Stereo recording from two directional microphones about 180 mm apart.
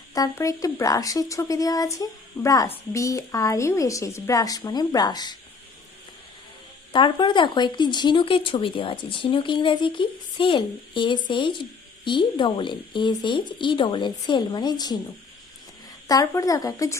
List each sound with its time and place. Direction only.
0.1 s speech: 20° left (ahead or behind)
6.9 s speech: 25° left (ahead or behind)
16.0 s speech: 20° left (ahead or behind)